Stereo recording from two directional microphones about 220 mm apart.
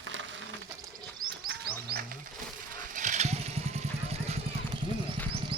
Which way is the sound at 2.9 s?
35° right (ahead or behind).